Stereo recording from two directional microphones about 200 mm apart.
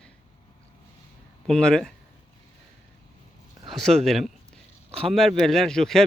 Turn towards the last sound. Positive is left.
turn(degrees=0)  # may be behind; listen again after turning